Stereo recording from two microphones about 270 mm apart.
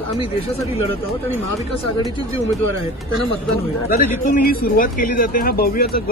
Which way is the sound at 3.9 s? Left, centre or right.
Left.